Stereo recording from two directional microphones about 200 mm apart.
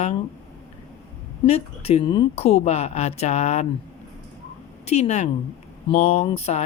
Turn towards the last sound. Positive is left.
turn(degrees=30)  # may be behind; listen again after turning